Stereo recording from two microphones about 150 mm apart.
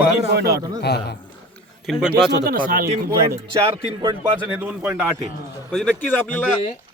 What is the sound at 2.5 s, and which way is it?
Speech, 70° right (ahead or behind).